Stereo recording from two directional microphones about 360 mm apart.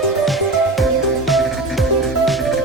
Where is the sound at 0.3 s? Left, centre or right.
Centre.